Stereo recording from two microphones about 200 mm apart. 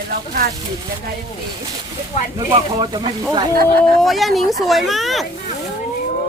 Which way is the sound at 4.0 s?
Centre (ahead or behind).